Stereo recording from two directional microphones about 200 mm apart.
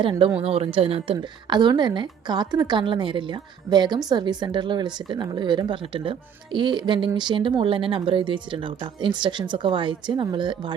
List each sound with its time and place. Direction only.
0.0 s speech: 25° right (ahead or behind)